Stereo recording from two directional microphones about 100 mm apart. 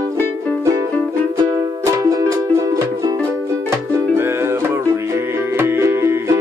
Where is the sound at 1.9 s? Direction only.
40° right (ahead or behind).